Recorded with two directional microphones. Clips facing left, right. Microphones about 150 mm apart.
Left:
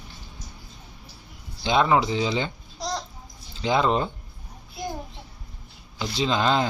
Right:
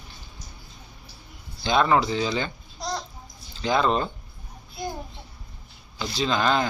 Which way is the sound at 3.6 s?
20° left (ahead or behind).